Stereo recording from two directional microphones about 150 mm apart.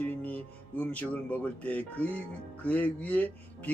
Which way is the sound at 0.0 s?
10° left (ahead or behind).